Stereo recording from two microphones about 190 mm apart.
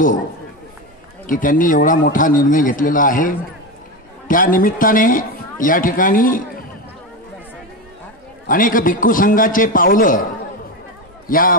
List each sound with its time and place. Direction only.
1.2 s speech: 45° left (ahead or behind)
8.5 s speech: 45° left (ahead or behind)
11.2 s a man's voice: 50° left (ahead or behind)